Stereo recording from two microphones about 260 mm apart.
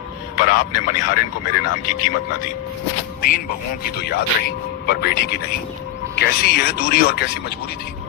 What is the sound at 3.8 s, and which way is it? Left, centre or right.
Speech, left.